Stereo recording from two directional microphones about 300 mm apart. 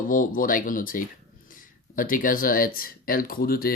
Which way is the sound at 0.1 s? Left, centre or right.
Left.